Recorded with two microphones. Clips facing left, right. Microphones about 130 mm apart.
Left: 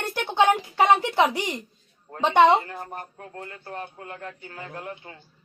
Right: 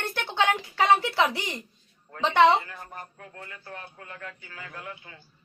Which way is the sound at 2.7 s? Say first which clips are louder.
Left 6 dB; 45° left (ahead or behind).